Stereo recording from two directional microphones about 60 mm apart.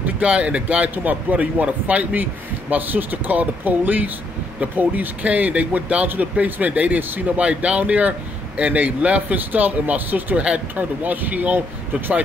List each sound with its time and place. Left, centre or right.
0.0 s speech: right
10.4 s speech: centre